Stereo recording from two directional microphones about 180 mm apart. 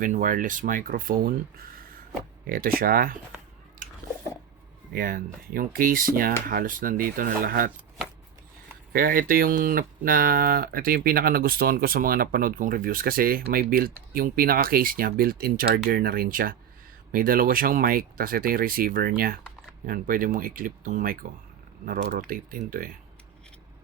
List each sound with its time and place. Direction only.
0.0 s speech: 50° right (ahead or behind)
4.9 s speech: 50° right (ahead or behind)
8.9 s speech: 55° right (ahead or behind)